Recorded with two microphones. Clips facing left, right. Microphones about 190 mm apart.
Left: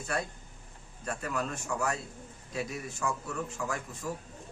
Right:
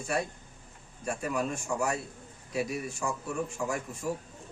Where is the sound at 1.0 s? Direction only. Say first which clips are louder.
Right 3 dB; 15° right (ahead or behind).